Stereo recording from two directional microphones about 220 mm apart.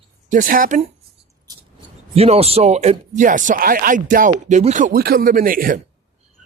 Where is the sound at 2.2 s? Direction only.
25° right (ahead or behind).